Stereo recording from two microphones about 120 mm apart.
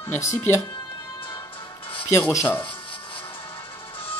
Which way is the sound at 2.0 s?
20° left (ahead or behind).